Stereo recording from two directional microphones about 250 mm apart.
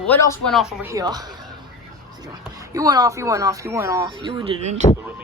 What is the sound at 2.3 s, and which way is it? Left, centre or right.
Speech, centre.